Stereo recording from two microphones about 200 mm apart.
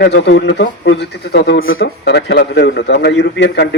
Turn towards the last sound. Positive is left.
turn(degrees=60)  # may be behind; listen again after turning